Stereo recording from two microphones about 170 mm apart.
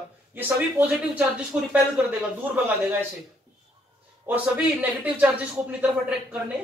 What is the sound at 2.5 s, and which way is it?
Speech, 10° right (ahead or behind).